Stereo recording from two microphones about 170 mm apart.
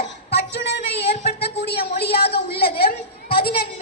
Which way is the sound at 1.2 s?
70° left (ahead or behind).